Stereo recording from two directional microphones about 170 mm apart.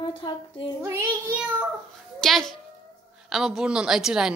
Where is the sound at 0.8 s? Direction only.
15° right (ahead or behind).